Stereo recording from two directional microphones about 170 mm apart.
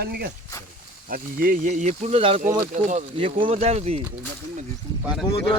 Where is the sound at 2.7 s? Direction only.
50° right (ahead or behind).